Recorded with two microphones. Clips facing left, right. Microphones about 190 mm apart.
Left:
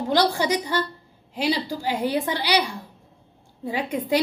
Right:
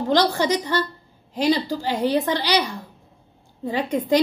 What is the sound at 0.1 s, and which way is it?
A woman's voice, 10° left (ahead or behind).